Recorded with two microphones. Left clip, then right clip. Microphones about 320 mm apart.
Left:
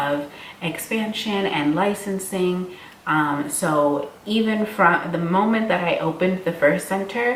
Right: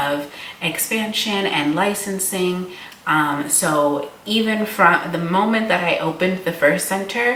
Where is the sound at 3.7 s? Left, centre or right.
Centre.